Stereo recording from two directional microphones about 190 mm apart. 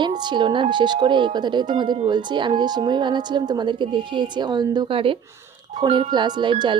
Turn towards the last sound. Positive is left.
turn(degrees=-25)  # may be behind; listen again after turning